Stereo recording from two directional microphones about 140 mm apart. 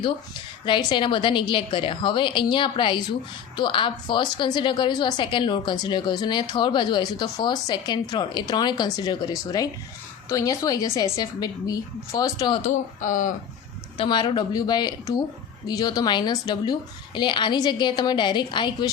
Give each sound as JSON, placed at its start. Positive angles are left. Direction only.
{"t": 0.6, "sound": "a woman's voice", "side_deg": 35}
{"t": 13.0, "sound": "speech", "side_deg": 70}
{"t": 13.9, "sound": "a woman's voice", "side_deg": 40}